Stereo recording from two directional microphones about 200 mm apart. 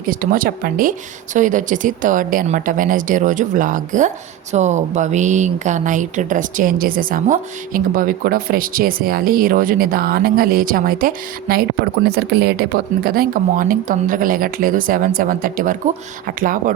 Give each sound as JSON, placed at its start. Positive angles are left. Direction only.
{"t": 0.0, "sound": "speech", "side_deg": -45}